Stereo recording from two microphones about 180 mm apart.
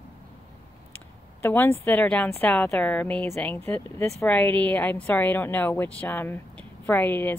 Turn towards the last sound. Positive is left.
turn(degrees=10)  # may be behind; listen again after turning